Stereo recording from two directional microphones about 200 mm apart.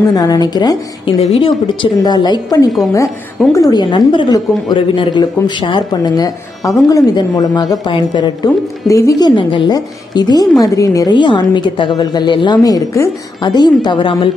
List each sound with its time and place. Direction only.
0.1 s speech: 20° left (ahead or behind)
3.4 s a woman's voice: centre (ahead or behind)
3.7 s speech: 25° left (ahead or behind)